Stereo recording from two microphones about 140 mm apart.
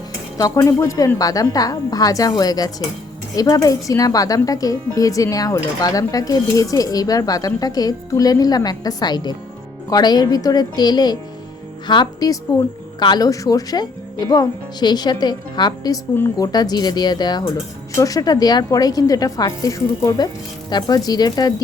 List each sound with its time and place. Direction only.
0.3 s speech: 25° left (ahead or behind)
16.1 s speech: 15° left (ahead or behind)
16.5 s speech: 30° left (ahead or behind)